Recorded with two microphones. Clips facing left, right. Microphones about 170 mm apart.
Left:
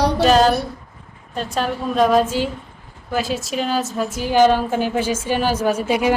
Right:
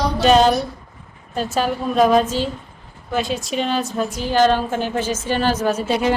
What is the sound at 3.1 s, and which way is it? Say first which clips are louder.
A woman's voice: even; centre (ahead or behind).